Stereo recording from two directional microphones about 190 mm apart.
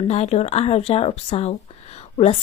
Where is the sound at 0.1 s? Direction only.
35° left (ahead or behind).